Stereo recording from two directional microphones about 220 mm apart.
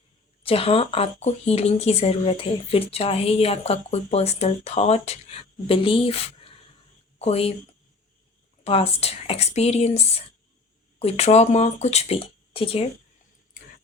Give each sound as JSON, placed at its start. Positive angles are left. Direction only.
{"t": 0.4, "sound": "speech", "side_deg": 25}
{"t": 11.0, "sound": "speech", "side_deg": 30}